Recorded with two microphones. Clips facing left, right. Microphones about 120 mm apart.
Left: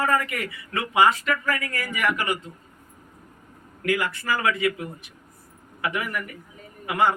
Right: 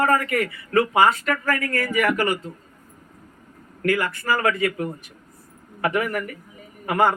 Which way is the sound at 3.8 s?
50° right (ahead or behind).